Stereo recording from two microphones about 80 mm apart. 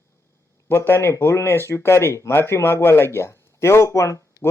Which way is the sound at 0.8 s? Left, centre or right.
Left.